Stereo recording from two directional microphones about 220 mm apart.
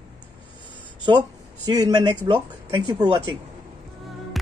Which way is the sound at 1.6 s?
15° right (ahead or behind).